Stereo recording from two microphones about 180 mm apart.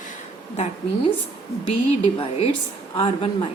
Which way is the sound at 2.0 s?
30° left (ahead or behind).